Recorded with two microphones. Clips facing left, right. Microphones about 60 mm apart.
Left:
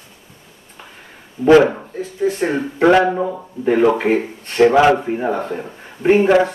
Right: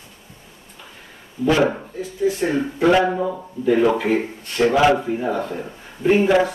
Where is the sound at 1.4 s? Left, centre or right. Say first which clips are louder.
Left 7 dB; left.